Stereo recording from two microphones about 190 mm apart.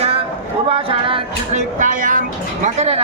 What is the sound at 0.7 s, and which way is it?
Speech, 30° right (ahead or behind).